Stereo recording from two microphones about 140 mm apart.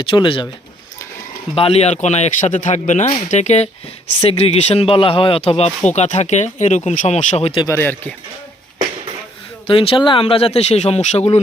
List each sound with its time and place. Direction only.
0.0 s speech: 40° left (ahead or behind)
1.5 s speech: 45° left (ahead or behind)
7.7 s speech: 15° left (ahead or behind)
9.6 s speech: 40° left (ahead or behind)